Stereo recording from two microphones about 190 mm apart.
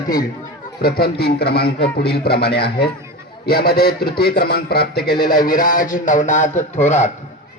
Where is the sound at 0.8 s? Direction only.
55° left (ahead or behind); by 7.1 s 35° left (ahead or behind).